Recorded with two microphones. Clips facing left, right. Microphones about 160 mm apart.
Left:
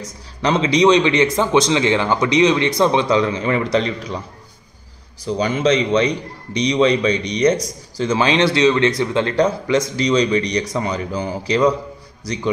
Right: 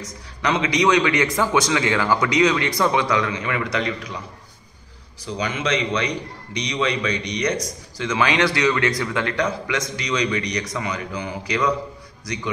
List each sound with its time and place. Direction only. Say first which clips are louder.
0.4 s a man's voice: left 5 dB; 30° left (ahead or behind)
5.2 s a man's voice: left 8 dB; 35° left (ahead or behind)